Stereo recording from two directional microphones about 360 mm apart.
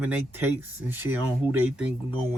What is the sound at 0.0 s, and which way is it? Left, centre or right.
Speech, centre.